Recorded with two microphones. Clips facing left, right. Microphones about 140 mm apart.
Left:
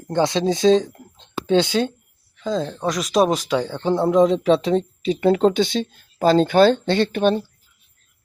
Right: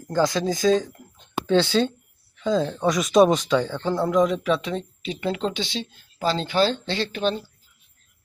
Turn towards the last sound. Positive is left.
turn(degrees=55)  # may be behind; listen again after turning